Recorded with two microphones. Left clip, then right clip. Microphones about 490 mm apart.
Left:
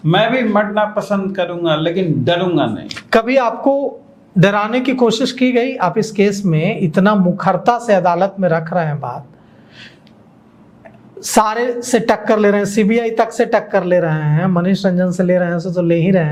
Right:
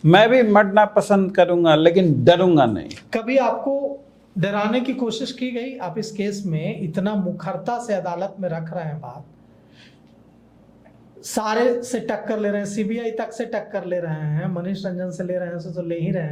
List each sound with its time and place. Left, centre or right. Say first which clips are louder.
0.0 s speech: right 1 dB; right
2.9 s a woman's voice: left 7 dB; left
11.2 s a woman's voice: left 6 dB; left